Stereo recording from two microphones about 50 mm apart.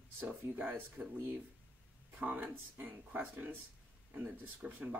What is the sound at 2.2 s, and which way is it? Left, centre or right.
Speech, right.